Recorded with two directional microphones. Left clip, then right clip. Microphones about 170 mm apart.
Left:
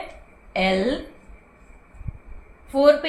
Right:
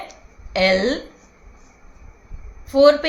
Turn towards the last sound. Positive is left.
turn(degrees=-40)  # may be behind; listen again after turning